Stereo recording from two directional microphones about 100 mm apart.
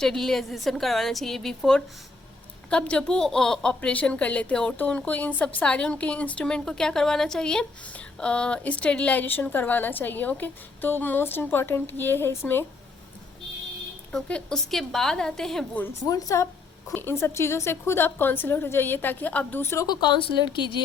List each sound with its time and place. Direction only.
0.0 s a woman's voice: 5° left (ahead or behind); by 12.6 s 25° left (ahead or behind)
14.1 s a woman's voice: 10° left (ahead or behind)
16.0 s a woman's voice: 35° left (ahead or behind)
16.9 s a woman's voice: 20° left (ahead or behind)
19.9 s speech: 50° left (ahead or behind)